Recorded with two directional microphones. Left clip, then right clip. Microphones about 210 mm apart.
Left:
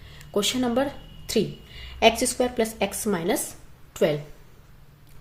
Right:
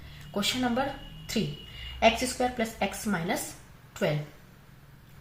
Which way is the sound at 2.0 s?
55° left (ahead or behind).